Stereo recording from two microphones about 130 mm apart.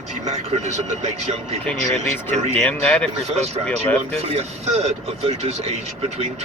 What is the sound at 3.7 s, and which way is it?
Speech, 10° left (ahead or behind).